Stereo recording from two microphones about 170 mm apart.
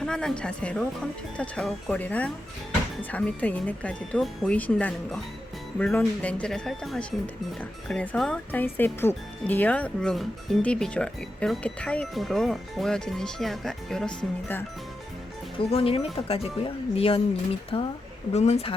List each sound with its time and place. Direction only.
0.0 s speech: 5° left (ahead or behind)
15.5 s speech: 35° left (ahead or behind)